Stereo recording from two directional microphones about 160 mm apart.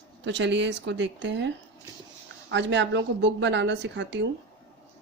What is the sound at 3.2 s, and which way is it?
Speech, 90° right.